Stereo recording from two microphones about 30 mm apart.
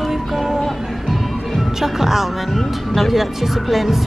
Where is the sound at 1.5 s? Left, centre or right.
Centre.